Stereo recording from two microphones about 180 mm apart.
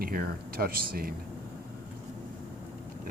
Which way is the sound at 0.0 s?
55° right (ahead or behind).